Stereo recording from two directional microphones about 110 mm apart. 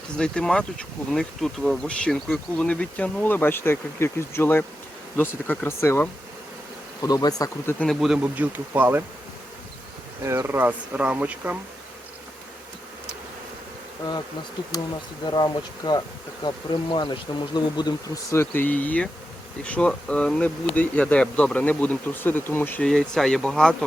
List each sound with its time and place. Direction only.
0.2 s speech: 10° left (ahead or behind)
7.0 s speech: 35° left (ahead or behind)
7.9 s speech: 5° right (ahead or behind)
8.2 s speech: 15° right (ahead or behind)
10.2 s speech: 25° right (ahead or behind)
14.7 s speech: 35° left (ahead or behind)
18.3 s speech: 20° left (ahead or behind)
22.9 s speech: 5° left (ahead or behind)